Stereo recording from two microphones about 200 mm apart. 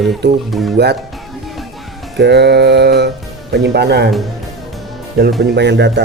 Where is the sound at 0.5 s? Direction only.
Centre (ahead or behind).